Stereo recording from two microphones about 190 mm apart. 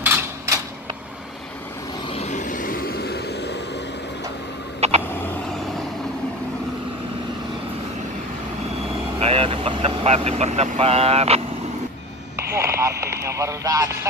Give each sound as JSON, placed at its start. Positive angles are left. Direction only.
{"t": 0.0, "sound": "a sound", "side_deg": -10}
{"t": 2.0, "sound": "vehicle", "side_deg": 35}
{"t": 4.7, "sound": "a sound", "side_deg": -35}
{"t": 9.2, "sound": "vehicle", "side_deg": -30}
{"t": 12.5, "sound": "radio", "side_deg": -15}
{"t": 13.0, "sound": "speech", "side_deg": -15}